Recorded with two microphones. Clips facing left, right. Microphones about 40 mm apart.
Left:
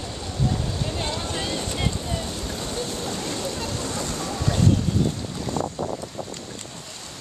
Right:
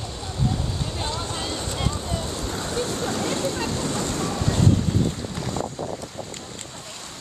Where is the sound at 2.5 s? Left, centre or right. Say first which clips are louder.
Right 5 dB; right.